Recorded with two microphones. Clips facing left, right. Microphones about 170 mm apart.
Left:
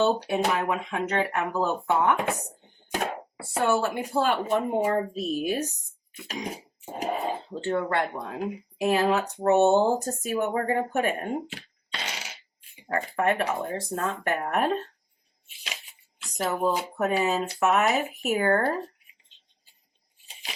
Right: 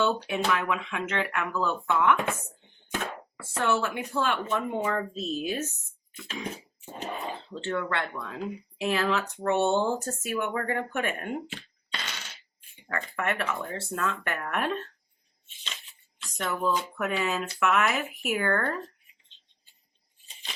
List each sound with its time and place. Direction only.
0.0 s speech: 40° left (ahead or behind)
2.5 s a sound: 45° left (ahead or behind)
3.4 s speech: 40° left (ahead or behind)
5.0 s a woman's voice: 10° left (ahead or behind)
6.1 s speech: 40° left (ahead or behind)
6.8 s a sound: 35° left (ahead or behind)
7.6 s speech: 40° left (ahead or behind); by 8.6 s 20° left (ahead or behind)
8.8 s speech: 40° left (ahead or behind)
12.0 s fart: 80° left
13.1 s speech: 35° left (ahead or behind)
15.4 s a sound: 10° left (ahead or behind)
16.4 s speech: 35° left (ahead or behind)